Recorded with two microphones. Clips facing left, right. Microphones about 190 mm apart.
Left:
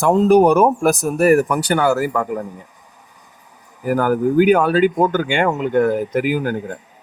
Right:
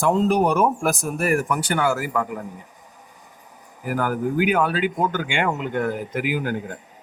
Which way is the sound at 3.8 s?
45° left (ahead or behind).